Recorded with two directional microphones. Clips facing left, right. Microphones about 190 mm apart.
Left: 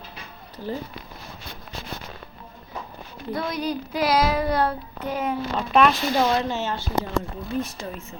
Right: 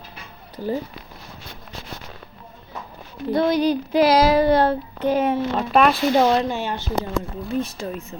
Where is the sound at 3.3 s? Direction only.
30° right (ahead or behind).